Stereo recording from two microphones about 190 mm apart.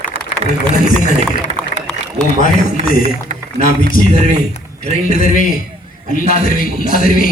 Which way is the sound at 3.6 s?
45° left (ahead or behind).